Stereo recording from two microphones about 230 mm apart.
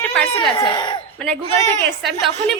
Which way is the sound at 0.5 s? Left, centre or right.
Centre.